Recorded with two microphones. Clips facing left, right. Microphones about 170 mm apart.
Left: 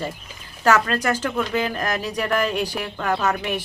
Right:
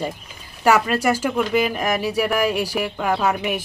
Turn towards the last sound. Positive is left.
turn(degrees=-10)  # may be behind; listen again after turning